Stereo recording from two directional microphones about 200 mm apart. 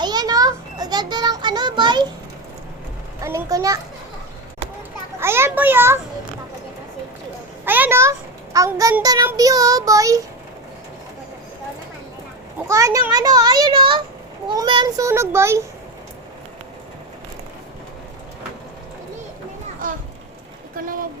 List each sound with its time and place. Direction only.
0.0 s children playing: 20° right (ahead or behind)
3.2 s a child's voice: 15° right (ahead or behind)
5.2 s child singing: 10° right (ahead or behind)
7.6 s a child's voice: 10° right (ahead or behind)
8.5 s child singing: 15° right (ahead or behind)
12.6 s a child's voice: 15° right (ahead or behind)
14.4 s child singing: 20° right (ahead or behind)
20.7 s a sound: 45° right (ahead or behind)